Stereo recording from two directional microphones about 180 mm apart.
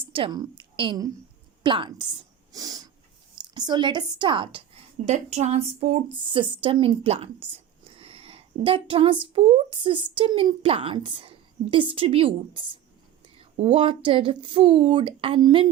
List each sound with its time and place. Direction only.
0.0 s a woman's voice: 30° right (ahead or behind)
2.5 s a sound: 20° right (ahead or behind)
3.4 s speech: 25° right (ahead or behind)